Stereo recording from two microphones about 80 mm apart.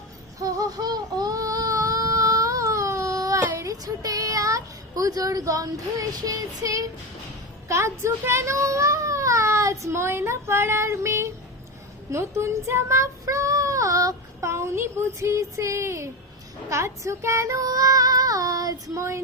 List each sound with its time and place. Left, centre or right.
0.3 s baby cry: right
3.5 s a sound: right
7.7 s speech: right
12.1 s child singing: right